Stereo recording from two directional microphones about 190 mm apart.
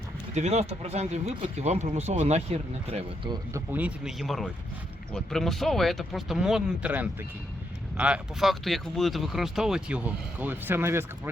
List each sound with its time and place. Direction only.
0.3 s speech: 35° right (ahead or behind)
3.5 s speech: 10° right (ahead or behind)